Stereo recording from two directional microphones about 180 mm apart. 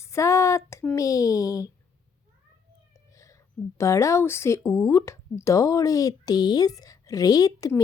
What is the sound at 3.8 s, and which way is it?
Speech, 15° left (ahead or behind).